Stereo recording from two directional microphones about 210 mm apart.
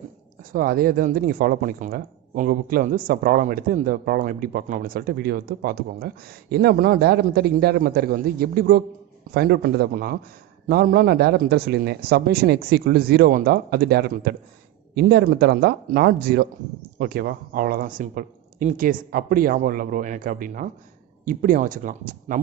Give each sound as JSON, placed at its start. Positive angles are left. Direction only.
{"t": 0.4, "sound": "a man's voice", "side_deg": -40}